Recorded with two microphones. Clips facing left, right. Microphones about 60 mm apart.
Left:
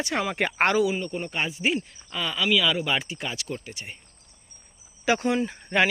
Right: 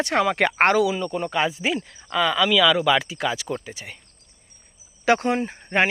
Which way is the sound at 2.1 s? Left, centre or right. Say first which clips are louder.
Right 5 dB; right.